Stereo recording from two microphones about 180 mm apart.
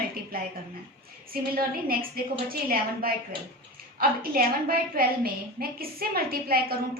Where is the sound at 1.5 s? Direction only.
55° right (ahead or behind).